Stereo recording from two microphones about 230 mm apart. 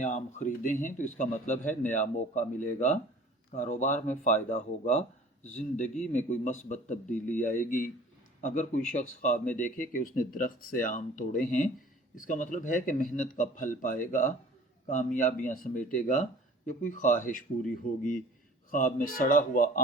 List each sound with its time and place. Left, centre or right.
0.0 s a man's voice: left
18.9 s a man's voice: left